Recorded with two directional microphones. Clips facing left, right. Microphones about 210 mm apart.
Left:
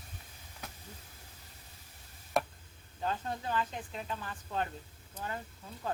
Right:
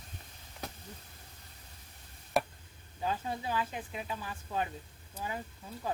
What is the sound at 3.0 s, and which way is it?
Speech, 5° right (ahead or behind).